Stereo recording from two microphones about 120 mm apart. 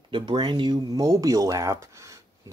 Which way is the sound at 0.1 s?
40° right (ahead or behind).